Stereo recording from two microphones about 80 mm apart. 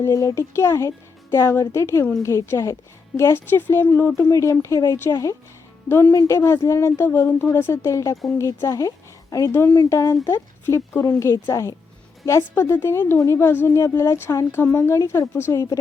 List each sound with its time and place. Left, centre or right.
0.0 s speech: left
4.3 s speech: left
5.9 s speech: left
10.2 s speech: left
12.4 s speech: left